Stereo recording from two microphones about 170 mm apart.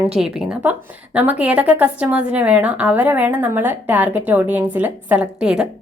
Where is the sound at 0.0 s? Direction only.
5° right (ahead or behind).